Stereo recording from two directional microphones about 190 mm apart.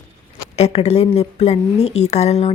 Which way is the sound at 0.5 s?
35° left (ahead or behind).